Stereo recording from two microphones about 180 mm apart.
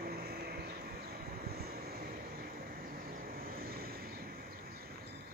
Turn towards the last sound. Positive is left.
turn(degrees=-55)  # may be behind; listen again after turning